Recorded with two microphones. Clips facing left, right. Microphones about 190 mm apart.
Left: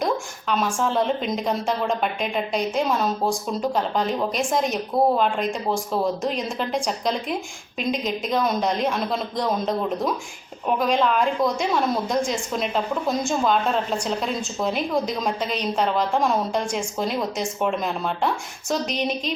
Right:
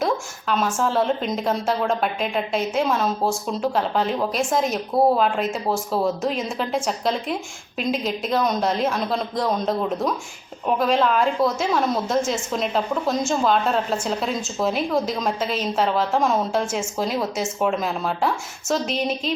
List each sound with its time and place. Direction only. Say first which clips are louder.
0.0 s a woman's voice: right 1 dB; centre (ahead or behind)